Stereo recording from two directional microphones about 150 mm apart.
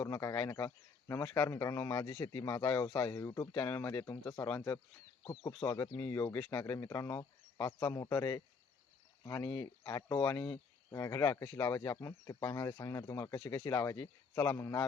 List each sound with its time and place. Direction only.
0.0 s speech: 20° left (ahead or behind)
5.2 s speech: 30° left (ahead or behind)
5.5 s speech: 10° left (ahead or behind)
10.9 s speech: 20° left (ahead or behind)
13.4 s speech: 35° left (ahead or behind)
13.7 s speech: 20° left (ahead or behind)